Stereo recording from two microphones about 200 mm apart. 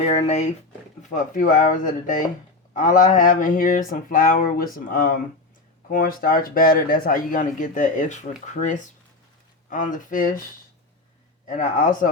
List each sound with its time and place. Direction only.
0.0 s speech: 35° left (ahead or behind)
11.4 s speech: 40° left (ahead or behind)